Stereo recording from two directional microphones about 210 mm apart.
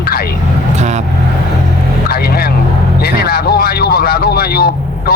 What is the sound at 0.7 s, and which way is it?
Vehicle, 35° right (ahead or behind).